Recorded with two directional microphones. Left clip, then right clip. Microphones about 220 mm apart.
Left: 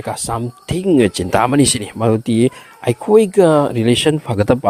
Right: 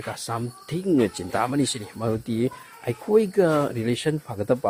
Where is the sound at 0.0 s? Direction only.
30° left (ahead or behind).